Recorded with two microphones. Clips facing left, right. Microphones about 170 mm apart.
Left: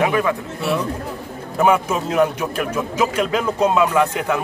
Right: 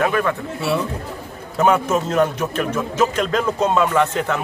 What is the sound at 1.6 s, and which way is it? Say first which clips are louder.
A man's voice: even; 10° left (ahead or behind).